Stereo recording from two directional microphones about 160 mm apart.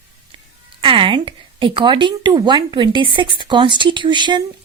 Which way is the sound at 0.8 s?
35° right (ahead or behind).